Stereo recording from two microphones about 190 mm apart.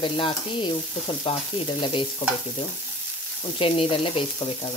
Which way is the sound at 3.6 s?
30° left (ahead or behind).